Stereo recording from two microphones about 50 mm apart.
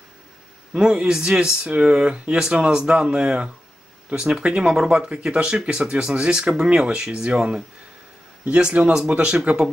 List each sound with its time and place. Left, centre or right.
0.7 s speech: centre